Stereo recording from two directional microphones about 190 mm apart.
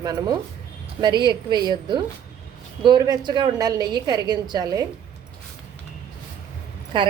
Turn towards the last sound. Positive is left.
turn(degrees=-25)  # may be behind; listen again after turning